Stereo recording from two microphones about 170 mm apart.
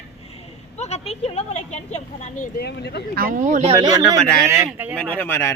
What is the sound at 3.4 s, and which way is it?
Speech, 40° right (ahead or behind).